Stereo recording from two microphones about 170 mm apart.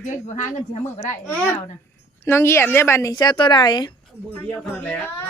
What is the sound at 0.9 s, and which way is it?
A woman's voice, 10° left (ahead or behind).